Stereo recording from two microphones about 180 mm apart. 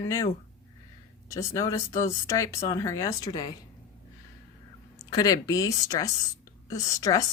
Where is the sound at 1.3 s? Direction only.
15° left (ahead or behind).